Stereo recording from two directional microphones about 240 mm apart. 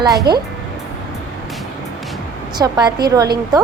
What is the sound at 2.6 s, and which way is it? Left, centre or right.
A woman's voice, centre.